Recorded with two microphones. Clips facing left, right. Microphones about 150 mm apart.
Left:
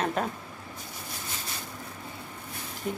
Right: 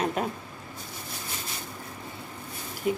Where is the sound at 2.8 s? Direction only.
10° right (ahead or behind).